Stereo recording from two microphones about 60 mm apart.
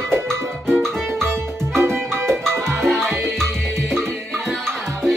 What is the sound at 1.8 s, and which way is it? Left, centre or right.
Music, right.